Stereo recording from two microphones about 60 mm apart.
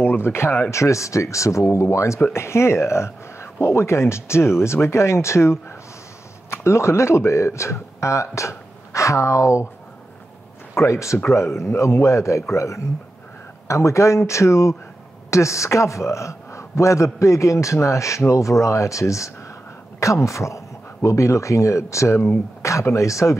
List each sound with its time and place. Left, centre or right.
0.0 s speech: left
0.7 s a man's voice: left
10.7 s a man's voice: left